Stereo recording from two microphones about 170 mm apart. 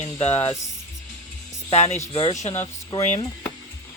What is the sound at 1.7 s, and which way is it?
Speech, 40° left (ahead or behind).